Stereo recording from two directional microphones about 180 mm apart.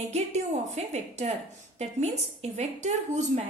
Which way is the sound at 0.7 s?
35° right (ahead or behind).